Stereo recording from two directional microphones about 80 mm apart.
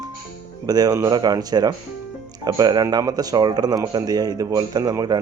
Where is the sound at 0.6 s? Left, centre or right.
Right.